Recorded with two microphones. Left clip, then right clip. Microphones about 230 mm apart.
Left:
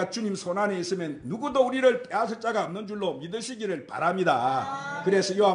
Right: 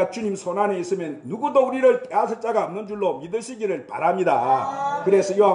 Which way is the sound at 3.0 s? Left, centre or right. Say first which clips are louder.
Right 7 dB; left.